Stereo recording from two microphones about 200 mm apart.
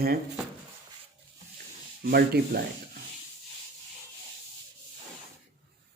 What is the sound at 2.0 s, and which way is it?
Speech, 50° right (ahead or behind).